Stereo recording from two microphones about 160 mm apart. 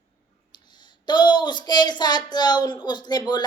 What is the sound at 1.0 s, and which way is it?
Speech, 30° left (ahead or behind).